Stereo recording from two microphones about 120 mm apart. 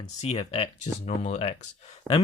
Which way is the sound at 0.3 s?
60° left (ahead or behind).